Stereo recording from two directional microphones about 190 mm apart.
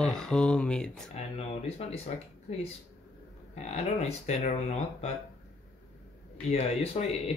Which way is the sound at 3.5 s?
35° left (ahead or behind).